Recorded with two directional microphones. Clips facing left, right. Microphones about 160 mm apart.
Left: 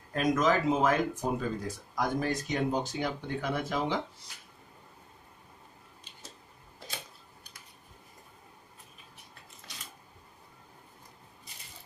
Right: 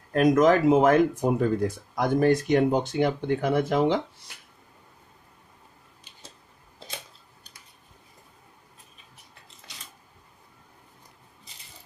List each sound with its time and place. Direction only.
0.1 s speech: 60° right (ahead or behind)